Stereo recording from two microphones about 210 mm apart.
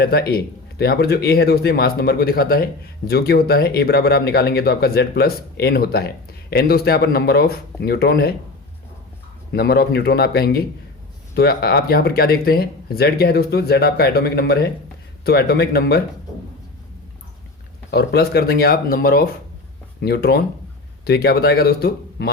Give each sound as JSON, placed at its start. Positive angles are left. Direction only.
{"t": 0.0, "sound": "speech", "side_deg": 50}
{"t": 9.5, "sound": "speech", "side_deg": 50}
{"t": 17.9, "sound": "speech", "side_deg": 50}